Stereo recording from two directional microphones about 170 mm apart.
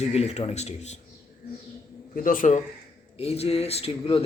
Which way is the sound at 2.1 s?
55° left (ahead or behind).